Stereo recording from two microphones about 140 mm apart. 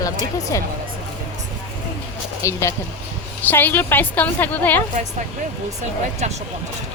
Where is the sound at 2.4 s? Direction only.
20° left (ahead or behind).